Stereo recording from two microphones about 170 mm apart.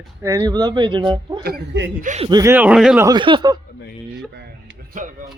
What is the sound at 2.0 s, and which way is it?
Speech, 45° right (ahead or behind).